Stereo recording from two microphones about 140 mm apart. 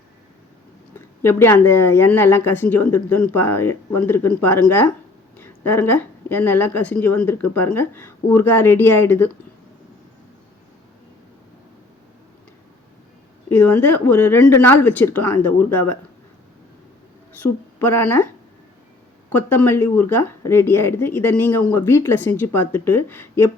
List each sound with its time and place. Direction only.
0.9 s a woman's voice: 20° left (ahead or behind)
13.5 s a woman's voice: 15° left (ahead or behind)
17.4 s speech: 15° left (ahead or behind)
19.3 s a woman's voice: 15° left (ahead or behind)